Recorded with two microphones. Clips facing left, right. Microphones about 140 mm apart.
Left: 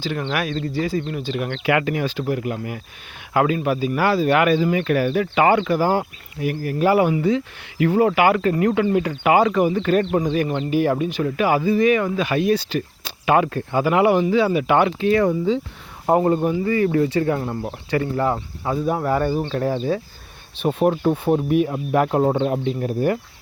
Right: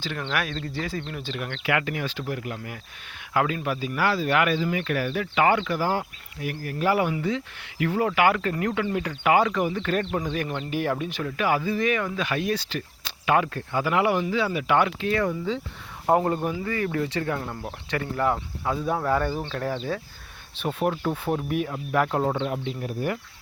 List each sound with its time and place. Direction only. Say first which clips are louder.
0.0 s speech: left 5 dB; 10° left (ahead or behind)
1.6 s speech: left 6 dB; 25° left (ahead or behind)
5.3 s speech: left 3 dB; 25° left (ahead or behind)
6.4 s speech: left 7 dB; 20° left (ahead or behind)
10.6 s speech: left 7 dB; 5° left (ahead or behind)
11.3 s speech: left 6 dB; 15° left (ahead or behind)
16.0 s speech: left 5 dB; 10° left (ahead or behind); by 23.1 s 30° left (ahead or behind)